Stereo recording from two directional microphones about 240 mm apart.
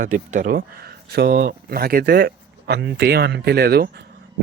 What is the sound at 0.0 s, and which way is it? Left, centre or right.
Speech, right.